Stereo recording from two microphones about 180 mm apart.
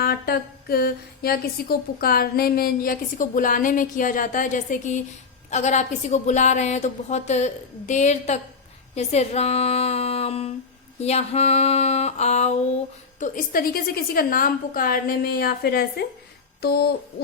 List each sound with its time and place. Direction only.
0.0 s a woman's voice: 60° left (ahead or behind)